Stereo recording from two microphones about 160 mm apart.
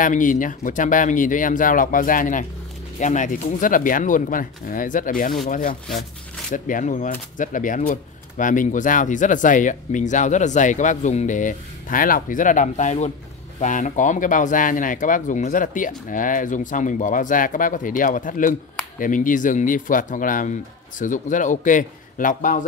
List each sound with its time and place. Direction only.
0.0 s speech: 55° left (ahead or behind)
5.9 s speech: centre (ahead or behind)
6.5 s speech: 55° left (ahead or behind)